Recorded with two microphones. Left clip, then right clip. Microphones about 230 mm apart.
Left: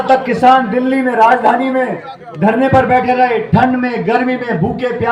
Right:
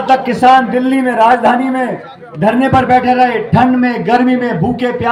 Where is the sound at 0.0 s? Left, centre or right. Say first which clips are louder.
Right 1 dB; right.